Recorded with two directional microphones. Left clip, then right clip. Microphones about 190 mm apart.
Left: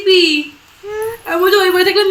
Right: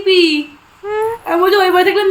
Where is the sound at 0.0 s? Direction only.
60° right (ahead or behind).